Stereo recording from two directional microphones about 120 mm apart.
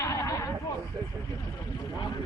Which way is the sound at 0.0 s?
25° left (ahead or behind).